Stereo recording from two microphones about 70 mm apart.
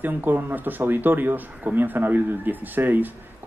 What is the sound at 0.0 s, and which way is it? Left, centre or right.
Speech, right.